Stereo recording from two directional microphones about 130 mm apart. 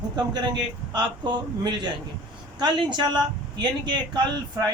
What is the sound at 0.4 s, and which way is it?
Speech, 35° right (ahead or behind).